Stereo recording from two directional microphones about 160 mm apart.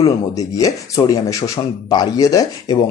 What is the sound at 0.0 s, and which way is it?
Speech, 20° left (ahead or behind).